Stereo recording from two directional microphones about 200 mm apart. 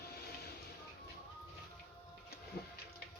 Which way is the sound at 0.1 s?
50° left (ahead or behind).